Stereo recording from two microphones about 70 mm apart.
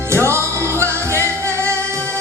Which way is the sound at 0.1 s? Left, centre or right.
Right.